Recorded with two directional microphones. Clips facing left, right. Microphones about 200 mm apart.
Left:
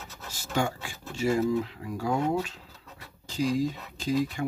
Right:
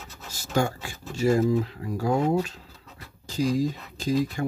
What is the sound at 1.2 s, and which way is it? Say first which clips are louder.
Speech: right 4 dB; 40° right (ahead or behind).